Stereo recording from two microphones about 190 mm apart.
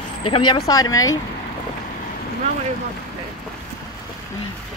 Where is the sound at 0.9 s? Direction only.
90° left.